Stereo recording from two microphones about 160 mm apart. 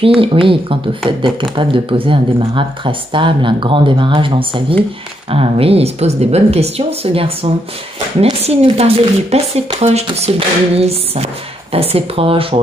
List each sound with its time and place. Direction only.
0.0 s speech: 35° right (ahead or behind)